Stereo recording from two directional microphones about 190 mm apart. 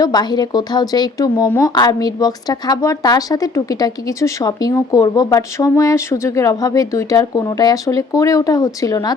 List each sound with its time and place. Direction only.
0.0 s speech: 20° left (ahead or behind)